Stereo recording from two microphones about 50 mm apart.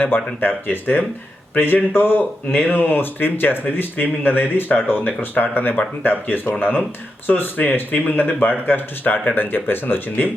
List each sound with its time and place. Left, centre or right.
0.3 s speech: left